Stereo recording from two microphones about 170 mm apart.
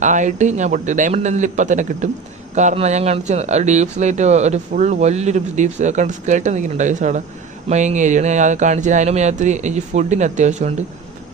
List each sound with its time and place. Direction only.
0.0 s speech: 45° right (ahead or behind)